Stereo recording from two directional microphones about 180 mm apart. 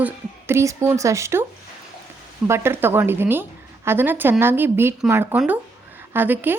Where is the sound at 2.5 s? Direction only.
15° right (ahead or behind).